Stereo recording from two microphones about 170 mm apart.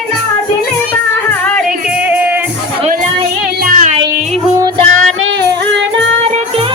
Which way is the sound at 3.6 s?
45° right (ahead or behind).